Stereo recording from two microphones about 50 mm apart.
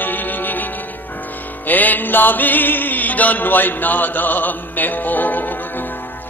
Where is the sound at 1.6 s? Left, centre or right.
Left.